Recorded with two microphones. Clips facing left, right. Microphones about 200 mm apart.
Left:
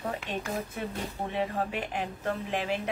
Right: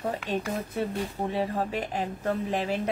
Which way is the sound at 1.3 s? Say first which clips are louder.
Right 1 dB; 35° right (ahead or behind).